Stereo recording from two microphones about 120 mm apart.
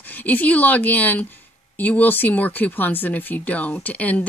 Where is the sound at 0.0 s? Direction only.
15° left (ahead or behind).